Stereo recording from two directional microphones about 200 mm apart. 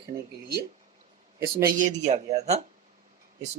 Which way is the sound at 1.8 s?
35° right (ahead or behind).